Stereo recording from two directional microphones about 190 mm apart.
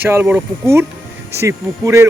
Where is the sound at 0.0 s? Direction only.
10° right (ahead or behind).